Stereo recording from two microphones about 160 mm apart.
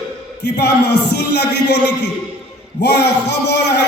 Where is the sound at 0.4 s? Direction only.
90° left.